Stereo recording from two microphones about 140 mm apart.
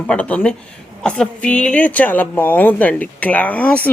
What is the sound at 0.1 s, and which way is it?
A woman's voice, 10° left (ahead or behind).